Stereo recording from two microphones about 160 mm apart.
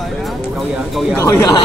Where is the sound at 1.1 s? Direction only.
20° left (ahead or behind).